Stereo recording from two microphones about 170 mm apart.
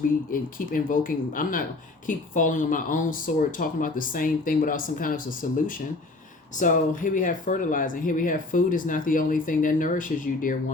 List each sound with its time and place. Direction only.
0.3 s speech: 55° left (ahead or behind)